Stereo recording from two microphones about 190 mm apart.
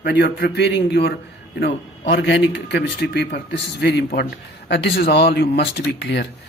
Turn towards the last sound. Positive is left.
turn(degrees=65)  # may be behind; listen again after turning